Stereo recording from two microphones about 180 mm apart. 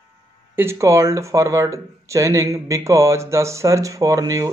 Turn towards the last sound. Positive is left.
turn(degrees=-20)  # may be behind; listen again after turning